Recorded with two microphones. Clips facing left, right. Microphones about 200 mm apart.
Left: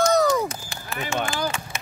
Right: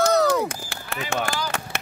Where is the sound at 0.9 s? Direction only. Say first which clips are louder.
Even; 70° right (ahead or behind).